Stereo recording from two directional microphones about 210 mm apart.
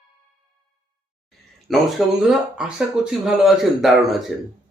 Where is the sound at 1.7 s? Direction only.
Centre (ahead or behind).